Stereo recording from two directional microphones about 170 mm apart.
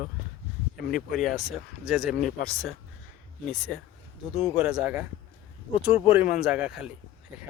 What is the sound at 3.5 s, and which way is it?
Speech, centre (ahead or behind).